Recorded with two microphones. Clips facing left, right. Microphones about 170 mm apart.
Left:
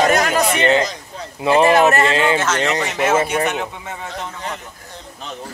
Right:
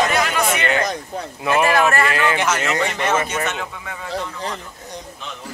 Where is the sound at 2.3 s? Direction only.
10° right (ahead or behind).